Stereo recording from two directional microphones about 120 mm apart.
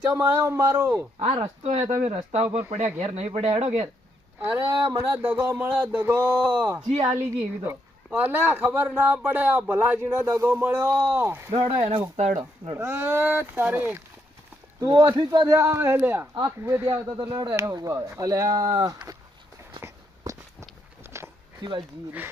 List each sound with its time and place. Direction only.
0.1 s speech: 20° right (ahead or behind)
1.6 s speech: 65° right (ahead or behind)
4.4 s speech: 20° right (ahead or behind)
4.8 s speech: 30° right (ahead or behind)
5.1 s a woman's voice: 20° right (ahead or behind)
11.8 s speech: 60° right (ahead or behind); by 12.4 s 75° right (ahead or behind)
12.7 s speech: 20° right (ahead or behind)
14.8 s speech: 30° right (ahead or behind)
15.5 s speech: 20° right (ahead or behind)
19.8 s walk: 20° right (ahead or behind)